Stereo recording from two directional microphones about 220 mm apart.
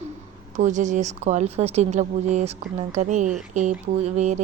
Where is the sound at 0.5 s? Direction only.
35° right (ahead or behind).